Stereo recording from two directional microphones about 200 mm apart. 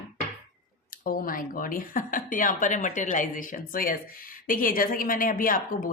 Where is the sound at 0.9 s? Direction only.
45° left (ahead or behind).